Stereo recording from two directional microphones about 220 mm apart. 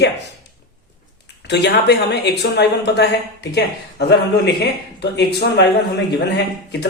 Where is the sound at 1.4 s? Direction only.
50° left (ahead or behind).